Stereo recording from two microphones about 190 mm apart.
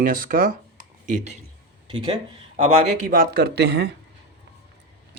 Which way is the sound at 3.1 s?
50° right (ahead or behind).